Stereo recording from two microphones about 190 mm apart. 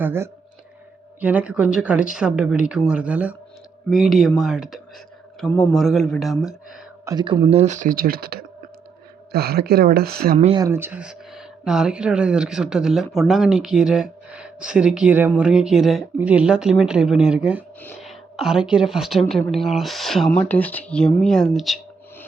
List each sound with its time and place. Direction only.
0.0 s speech: 10° right (ahead or behind)
5.4 s a man's voice: 10° left (ahead or behind)
5.7 s speech: centre (ahead or behind)
7.0 s speech: 20° right (ahead or behind); by 10.3 s 55° right (ahead or behind)
10.3 s speech: 30° right (ahead or behind)
10.6 s speech: 10° right (ahead or behind)